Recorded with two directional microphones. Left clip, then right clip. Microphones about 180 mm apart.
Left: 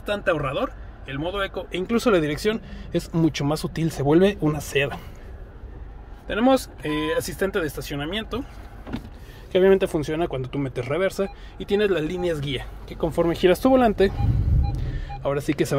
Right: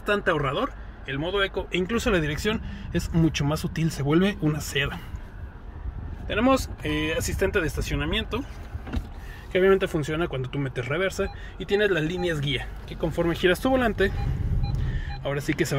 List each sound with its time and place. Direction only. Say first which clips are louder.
0.0 s speech: even; 15° right (ahead or behind)
0.4 s speech: left 1 dB; centre (ahead or behind)
1.8 s speech: left 5 dB; 15° left (ahead or behind)
6.2 s speech: left 2 dB; 15° left (ahead or behind)
9.5 s speech: left 3 dB; 20° left (ahead or behind)
15.2 s speech: left 3 dB; 20° left (ahead or behind)